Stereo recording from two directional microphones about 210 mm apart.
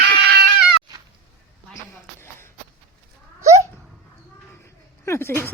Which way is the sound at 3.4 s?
15° right (ahead or behind).